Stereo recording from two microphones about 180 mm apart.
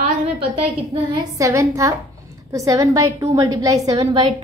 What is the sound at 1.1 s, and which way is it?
A woman's voice, 15° right (ahead or behind).